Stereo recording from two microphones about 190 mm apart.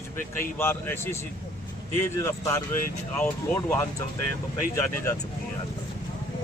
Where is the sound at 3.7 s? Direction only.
10° left (ahead or behind).